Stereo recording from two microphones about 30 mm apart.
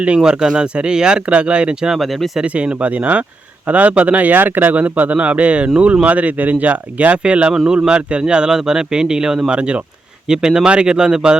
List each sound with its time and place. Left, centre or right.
0.2 s speech: right
0.5 s speech: right
1.3 s speech: right
6.1 s speech: right
7.3 s speech: right
8.4 s speech: centre
9.5 s speech: right
10.2 s speech: right